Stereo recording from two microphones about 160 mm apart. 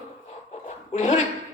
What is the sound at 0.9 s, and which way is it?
Speech, 45° left (ahead or behind).